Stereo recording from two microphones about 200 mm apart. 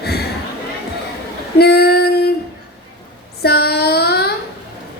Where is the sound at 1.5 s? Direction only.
55° left (ahead or behind).